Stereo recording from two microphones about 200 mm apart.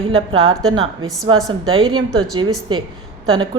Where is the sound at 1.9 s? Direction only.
20° right (ahead or behind).